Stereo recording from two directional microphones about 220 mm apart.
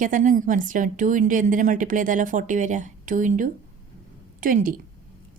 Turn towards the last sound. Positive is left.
turn(degrees=-40)  # may be behind; listen again after turning